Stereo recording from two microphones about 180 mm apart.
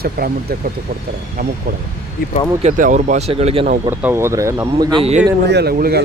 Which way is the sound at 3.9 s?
15° right (ahead or behind).